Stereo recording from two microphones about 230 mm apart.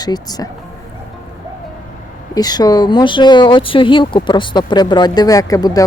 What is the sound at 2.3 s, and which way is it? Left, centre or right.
Speech, centre.